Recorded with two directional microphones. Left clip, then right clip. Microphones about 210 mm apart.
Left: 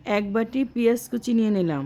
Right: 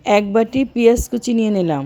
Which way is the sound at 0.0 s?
15° right (ahead or behind).